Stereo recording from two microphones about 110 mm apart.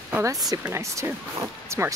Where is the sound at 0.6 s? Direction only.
25° right (ahead or behind).